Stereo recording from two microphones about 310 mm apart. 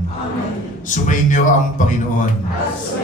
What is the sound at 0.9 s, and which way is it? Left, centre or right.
Speech, left.